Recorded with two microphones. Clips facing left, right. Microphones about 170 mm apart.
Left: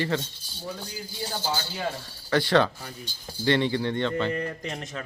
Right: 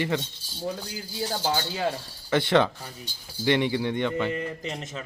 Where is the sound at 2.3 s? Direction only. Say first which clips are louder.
Even; 20° right (ahead or behind).